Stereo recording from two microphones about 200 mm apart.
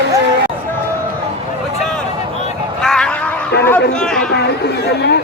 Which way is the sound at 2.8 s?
5° left (ahead or behind).